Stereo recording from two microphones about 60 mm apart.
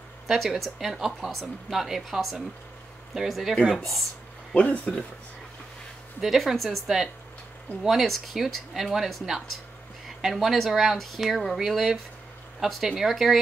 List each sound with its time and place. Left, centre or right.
0.3 s speech: centre
4.6 s speech: centre
6.2 s speech: centre